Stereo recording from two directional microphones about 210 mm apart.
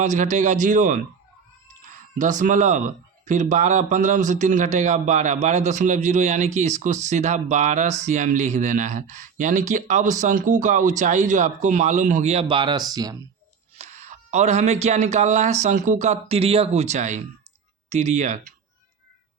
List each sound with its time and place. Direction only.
0.0 s speech: 35° right (ahead or behind); by 13.1 s 20° right (ahead or behind)
13.7 s speech: 35° right (ahead or behind)